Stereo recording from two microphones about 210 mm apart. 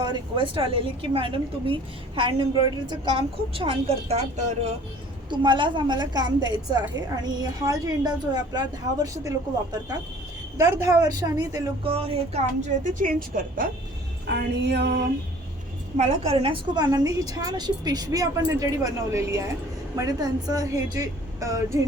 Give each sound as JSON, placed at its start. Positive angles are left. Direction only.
{"t": 0.0, "sound": "a woman's voice", "side_deg": -20}
{"t": 5.3, "sound": "a woman's voice", "side_deg": -20}
{"t": 10.6, "sound": "a woman's voice", "side_deg": -15}
{"t": 14.3, "sound": "music", "side_deg": -55}
{"t": 16.0, "sound": "a woman's voice", "side_deg": -30}